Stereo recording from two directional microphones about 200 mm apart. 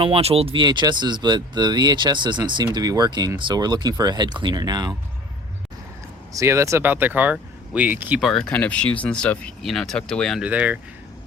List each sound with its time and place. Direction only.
0.0 s speech: 30° right (ahead or behind)
6.3 s speech: 15° right (ahead or behind)